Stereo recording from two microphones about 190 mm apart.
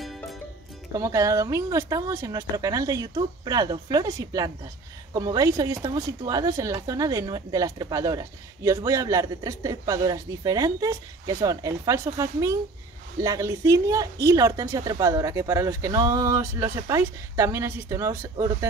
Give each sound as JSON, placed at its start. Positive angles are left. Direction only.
{"t": 0.0, "sound": "music", "side_deg": 0}
{"t": 0.9, "sound": "a woman's voice", "side_deg": -15}